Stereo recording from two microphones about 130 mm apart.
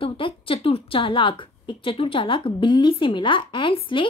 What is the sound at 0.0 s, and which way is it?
A woman's voice, 45° left (ahead or behind).